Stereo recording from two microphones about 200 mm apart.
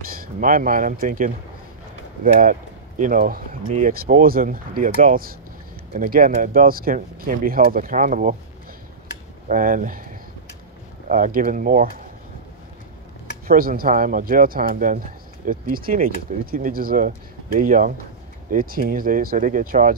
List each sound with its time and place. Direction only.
0.1 s speech: 45° right (ahead or behind)
3.0 s speech: 45° right (ahead or behind)
9.5 s speech: 45° right (ahead or behind)
11.1 s speech: 45° right (ahead or behind)
13.5 s speech: 45° right (ahead or behind)